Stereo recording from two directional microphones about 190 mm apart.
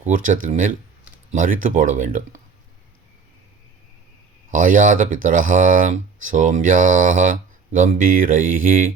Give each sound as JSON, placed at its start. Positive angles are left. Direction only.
{"t": 0.0, "sound": "speech", "side_deg": -45}
{"t": 4.5, "sound": "speech", "side_deg": -45}